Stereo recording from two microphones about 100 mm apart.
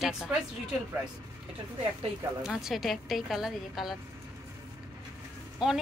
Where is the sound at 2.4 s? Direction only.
5° right (ahead or behind).